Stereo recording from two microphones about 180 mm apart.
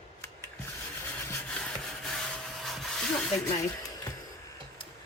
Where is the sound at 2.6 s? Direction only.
Centre (ahead or behind).